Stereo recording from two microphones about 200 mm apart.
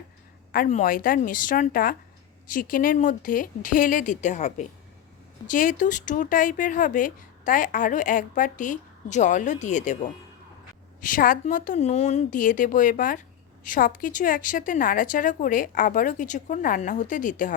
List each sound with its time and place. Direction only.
0.5 s a woman's voice: 40° left (ahead or behind)